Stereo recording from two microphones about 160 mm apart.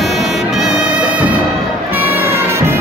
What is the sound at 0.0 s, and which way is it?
Music, centre (ahead or behind).